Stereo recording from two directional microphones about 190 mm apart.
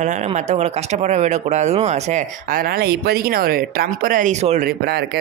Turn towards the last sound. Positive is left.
turn(degrees=-60)  # may be behind; listen again after turning